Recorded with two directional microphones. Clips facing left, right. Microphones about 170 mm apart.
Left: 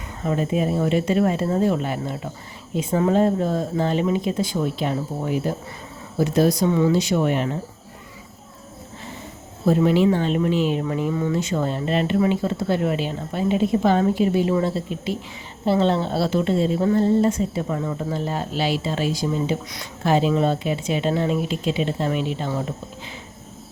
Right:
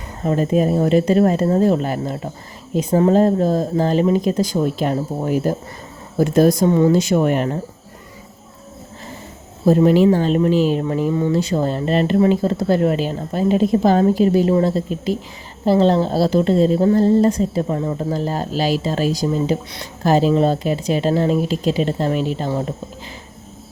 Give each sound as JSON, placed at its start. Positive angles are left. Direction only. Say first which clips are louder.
{"t": 0.2, "sound": "a woman's voice", "louder": "right 5 dB", "side_deg": -40}
{"t": 9.6, "sound": "a woman's voice", "louder": "right 5 dB", "side_deg": -40}